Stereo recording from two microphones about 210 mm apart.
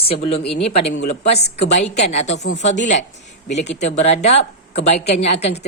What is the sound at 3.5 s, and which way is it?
A woman's voice, 35° left (ahead or behind).